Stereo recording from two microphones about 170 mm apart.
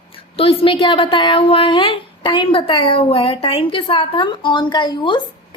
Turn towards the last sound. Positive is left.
turn(degrees=25)  # may be behind; listen again after turning